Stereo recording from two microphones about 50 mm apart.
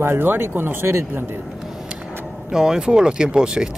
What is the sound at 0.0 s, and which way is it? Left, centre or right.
Speech, right.